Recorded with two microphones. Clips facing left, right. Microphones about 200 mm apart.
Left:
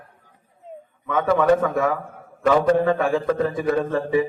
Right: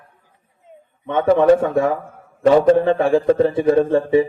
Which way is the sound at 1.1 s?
30° right (ahead or behind).